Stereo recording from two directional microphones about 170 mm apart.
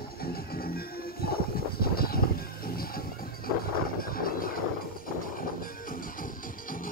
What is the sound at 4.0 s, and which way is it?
Music, 60° left (ahead or behind).